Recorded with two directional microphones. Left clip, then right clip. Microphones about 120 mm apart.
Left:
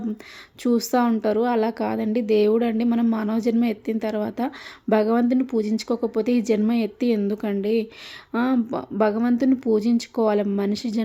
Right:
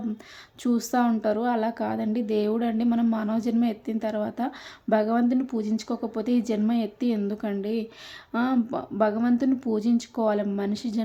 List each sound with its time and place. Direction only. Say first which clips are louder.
0.6 s a woman's voice: left 4 dB; 25° left (ahead or behind)